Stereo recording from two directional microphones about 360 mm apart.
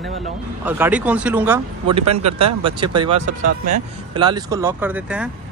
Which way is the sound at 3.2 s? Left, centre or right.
Right.